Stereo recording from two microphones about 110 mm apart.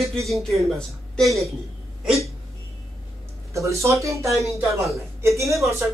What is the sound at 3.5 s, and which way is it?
Speech, 25° right (ahead or behind).